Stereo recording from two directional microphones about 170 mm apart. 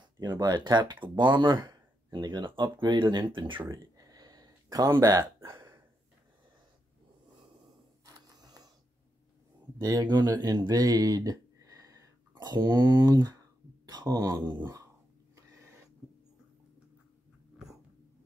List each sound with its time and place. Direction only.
0.0 s speech: 25° right (ahead or behind)
8.0 s mechanisms: 25° right (ahead or behind)
9.8 s speech: 20° right (ahead or behind)
15.3 s a sound: 15° right (ahead or behind)